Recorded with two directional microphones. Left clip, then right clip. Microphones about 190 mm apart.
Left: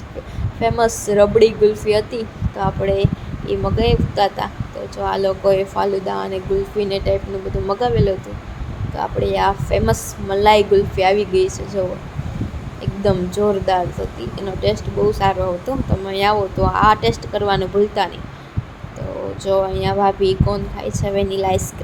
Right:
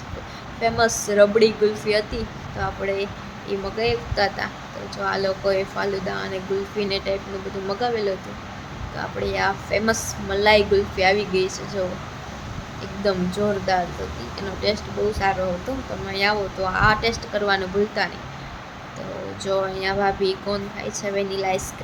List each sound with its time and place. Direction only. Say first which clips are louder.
0.6 s a woman's voice: left 3 dB; 20° left (ahead or behind)
13.1 s a woman's voice: left 5 dB; 20° left (ahead or behind)
19.5 s a woman's voice: left 5 dB; 15° left (ahead or behind)